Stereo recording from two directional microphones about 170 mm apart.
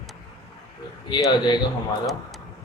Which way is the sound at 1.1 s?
25° left (ahead or behind).